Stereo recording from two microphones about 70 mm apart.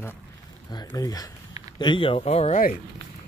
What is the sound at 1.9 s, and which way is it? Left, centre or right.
Speech, left.